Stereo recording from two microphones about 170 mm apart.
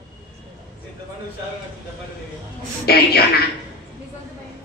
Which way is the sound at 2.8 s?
70° left (ahead or behind).